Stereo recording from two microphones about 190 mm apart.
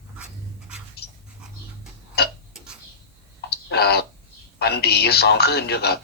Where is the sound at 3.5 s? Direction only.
55° left (ahead or behind).